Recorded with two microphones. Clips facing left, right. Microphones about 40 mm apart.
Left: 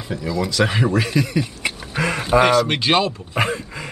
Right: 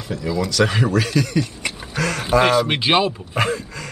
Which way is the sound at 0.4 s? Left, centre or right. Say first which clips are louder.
Even; centre.